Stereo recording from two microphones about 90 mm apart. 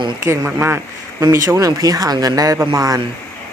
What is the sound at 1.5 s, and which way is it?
Speech, 40° right (ahead or behind).